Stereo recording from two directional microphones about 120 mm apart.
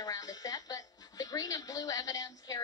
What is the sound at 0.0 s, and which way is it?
A woman's voice, 30° left (ahead or behind).